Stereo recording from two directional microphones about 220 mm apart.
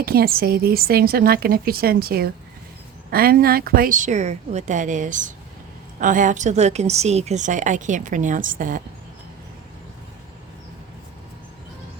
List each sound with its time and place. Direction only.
0.0 s a woman's voice: 45° right (ahead or behind)